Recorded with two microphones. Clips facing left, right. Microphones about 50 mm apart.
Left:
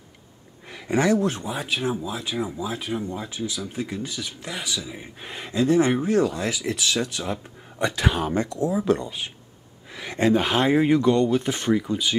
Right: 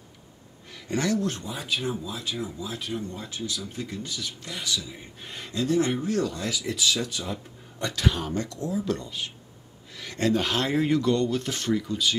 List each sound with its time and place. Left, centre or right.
0.7 s speech: left
1.5 s speech: centre
7.8 s speech: left